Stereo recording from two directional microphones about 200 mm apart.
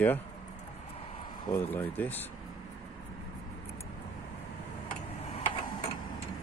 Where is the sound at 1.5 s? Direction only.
10° left (ahead or behind).